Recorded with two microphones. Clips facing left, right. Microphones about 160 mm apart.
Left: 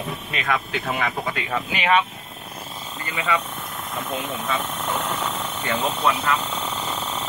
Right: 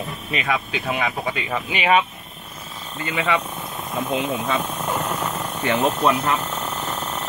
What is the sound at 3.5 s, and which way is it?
Helicopter, 20° right (ahead or behind).